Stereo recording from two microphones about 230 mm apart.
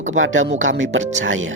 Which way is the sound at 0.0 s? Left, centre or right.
Right.